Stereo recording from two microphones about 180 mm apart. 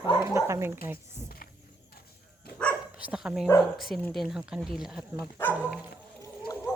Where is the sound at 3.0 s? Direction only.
5° right (ahead or behind).